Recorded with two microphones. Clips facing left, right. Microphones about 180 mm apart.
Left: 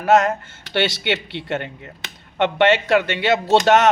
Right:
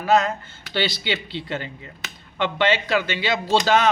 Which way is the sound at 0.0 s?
75° left (ahead or behind).